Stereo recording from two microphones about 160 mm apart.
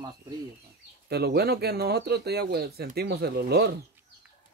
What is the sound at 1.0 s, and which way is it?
Speech, 90° right.